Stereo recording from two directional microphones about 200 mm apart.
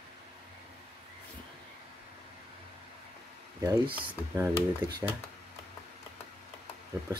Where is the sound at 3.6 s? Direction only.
20° right (ahead or behind).